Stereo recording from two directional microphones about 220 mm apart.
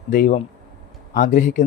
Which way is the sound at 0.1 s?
40° left (ahead or behind).